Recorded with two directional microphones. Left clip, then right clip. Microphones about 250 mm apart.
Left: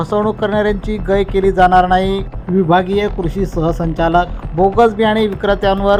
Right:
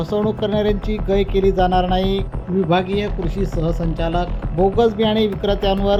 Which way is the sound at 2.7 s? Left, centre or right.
Centre.